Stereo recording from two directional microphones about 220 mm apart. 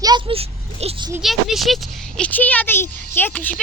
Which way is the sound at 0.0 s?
20° right (ahead or behind).